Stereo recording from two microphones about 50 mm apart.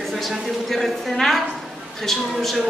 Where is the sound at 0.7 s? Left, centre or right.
Centre.